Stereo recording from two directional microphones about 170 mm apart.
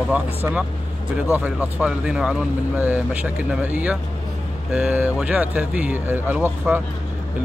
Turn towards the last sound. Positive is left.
turn(degrees=-10)  # may be behind; listen again after turning